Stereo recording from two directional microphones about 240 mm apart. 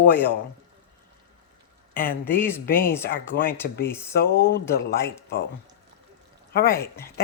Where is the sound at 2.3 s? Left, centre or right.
Centre.